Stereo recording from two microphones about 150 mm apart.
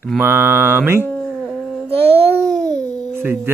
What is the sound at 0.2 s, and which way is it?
Speech, 15° right (ahead or behind).